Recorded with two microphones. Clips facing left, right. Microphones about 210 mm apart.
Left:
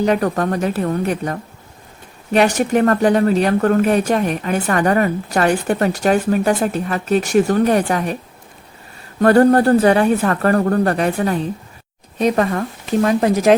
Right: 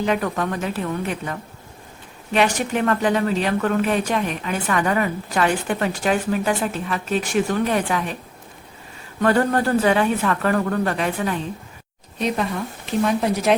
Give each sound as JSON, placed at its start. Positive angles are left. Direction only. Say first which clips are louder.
{"t": 0.0, "sound": "a man's voice", "louder": "left 5 dB", "side_deg": 40}
{"t": 9.2, "sound": "a man's voice", "louder": "left 7 dB", "side_deg": 40}
{"t": 12.4, "sound": "speech", "louder": "left 6 dB", "side_deg": 65}